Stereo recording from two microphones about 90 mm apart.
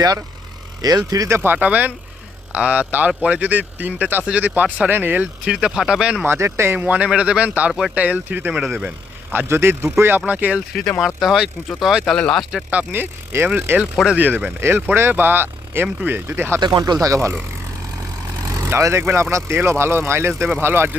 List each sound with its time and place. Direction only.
0.8 s speech: 45° right (ahead or behind)
1.3 s speech: 20° right (ahead or behind)
5.5 s speech: 10° right (ahead or behind)
6.2 s speech: 30° right (ahead or behind)
6.7 s speech: 15° right (ahead or behind)
7.7 s speech: 5° right (ahead or behind)
7.9 s speech: 15° right (ahead or behind)
11.0 s speech: centre (ahead or behind)
12.7 s speech: 20° right (ahead or behind)
16.6 s speech: 50° right (ahead or behind); by 17.4 s 30° right (ahead or behind)
18.5 s speech: 35° right (ahead or behind)